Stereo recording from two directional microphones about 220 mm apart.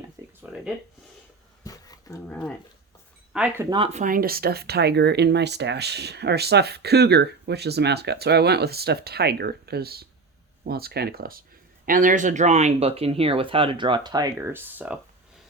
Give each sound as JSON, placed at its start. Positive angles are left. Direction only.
{"t": 0.2, "sound": "a sound", "side_deg": -15}
{"t": 1.6, "sound": "dog", "side_deg": 15}
{"t": 3.3, "sound": "speech", "side_deg": -5}
{"t": 3.7, "sound": "speech", "side_deg": -25}